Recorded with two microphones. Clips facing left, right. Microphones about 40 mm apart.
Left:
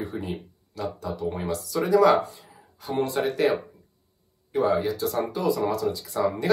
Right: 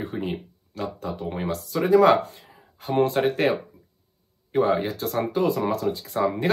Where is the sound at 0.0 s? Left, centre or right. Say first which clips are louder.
Right 2 dB; right.